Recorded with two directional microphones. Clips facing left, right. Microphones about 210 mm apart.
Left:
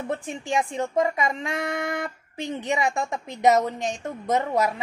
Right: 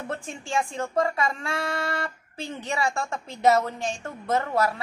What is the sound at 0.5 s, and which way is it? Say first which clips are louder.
Speech: left 2 dB; 20° left (ahead or behind).